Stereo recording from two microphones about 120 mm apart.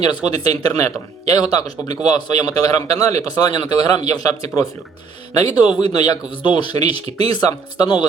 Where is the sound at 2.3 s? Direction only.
30° left (ahead or behind).